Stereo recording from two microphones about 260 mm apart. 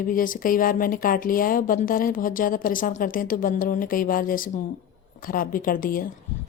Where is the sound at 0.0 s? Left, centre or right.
Left.